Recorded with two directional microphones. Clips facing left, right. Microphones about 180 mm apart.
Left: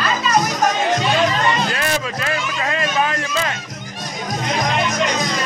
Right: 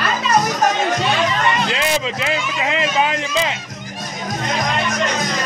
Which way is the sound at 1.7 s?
20° right (ahead or behind).